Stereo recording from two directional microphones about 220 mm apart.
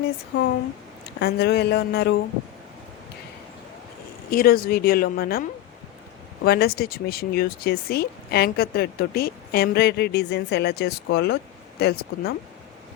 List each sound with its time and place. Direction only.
1.2 s speech: 45° left (ahead or behind)
4.3 s speech: 40° left (ahead or behind)